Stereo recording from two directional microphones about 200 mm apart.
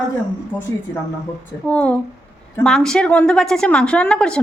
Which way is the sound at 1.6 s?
5° left (ahead or behind).